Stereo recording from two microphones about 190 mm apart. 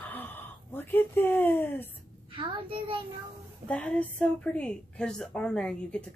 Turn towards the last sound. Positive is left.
turn(degrees=5)  # may be behind; listen again after turning